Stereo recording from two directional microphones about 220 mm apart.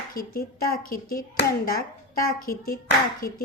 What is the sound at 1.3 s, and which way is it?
A woman's voice, 45° left (ahead or behind).